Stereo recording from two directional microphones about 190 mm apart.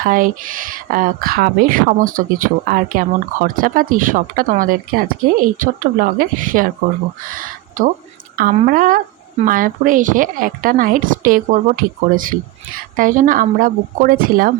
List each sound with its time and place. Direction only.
0.0 s speech: 45° right (ahead or behind)